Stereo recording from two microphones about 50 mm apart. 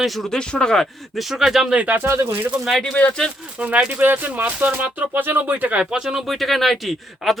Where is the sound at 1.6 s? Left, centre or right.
Right.